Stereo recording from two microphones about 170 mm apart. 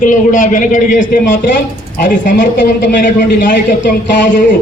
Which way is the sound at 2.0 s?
90° left.